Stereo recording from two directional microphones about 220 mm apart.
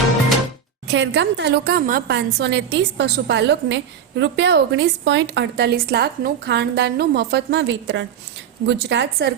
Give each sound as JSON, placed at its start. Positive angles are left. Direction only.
{"t": 0.9, "sound": "a woman's voice", "side_deg": -55}